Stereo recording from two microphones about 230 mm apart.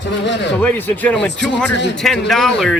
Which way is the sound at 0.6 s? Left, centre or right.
Centre.